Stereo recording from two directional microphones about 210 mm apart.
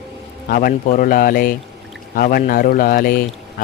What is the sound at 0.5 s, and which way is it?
Speech, 40° left (ahead or behind).